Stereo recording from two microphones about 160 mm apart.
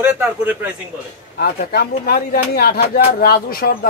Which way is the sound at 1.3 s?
75° left (ahead or behind).